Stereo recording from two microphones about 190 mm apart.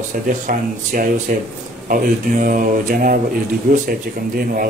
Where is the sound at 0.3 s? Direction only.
45° right (ahead or behind).